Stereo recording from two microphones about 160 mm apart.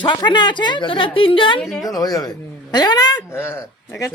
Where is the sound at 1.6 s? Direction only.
5° left (ahead or behind).